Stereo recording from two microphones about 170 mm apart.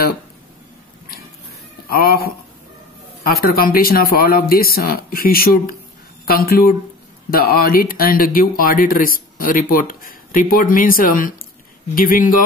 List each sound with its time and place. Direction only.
1.9 s speech: 60° left (ahead or behind)